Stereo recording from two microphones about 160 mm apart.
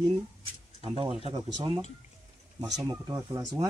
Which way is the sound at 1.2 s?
30° right (ahead or behind).